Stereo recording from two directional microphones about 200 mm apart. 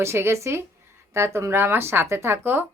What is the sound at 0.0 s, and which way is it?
Speech, 15° right (ahead or behind).